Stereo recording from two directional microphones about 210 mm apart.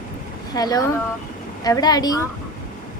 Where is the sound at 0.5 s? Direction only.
15° left (ahead or behind).